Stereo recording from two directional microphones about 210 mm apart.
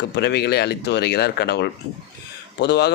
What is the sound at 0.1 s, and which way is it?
Speech, 55° left (ahead or behind).